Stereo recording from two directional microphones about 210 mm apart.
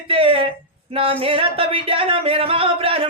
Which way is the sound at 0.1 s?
25° right (ahead or behind).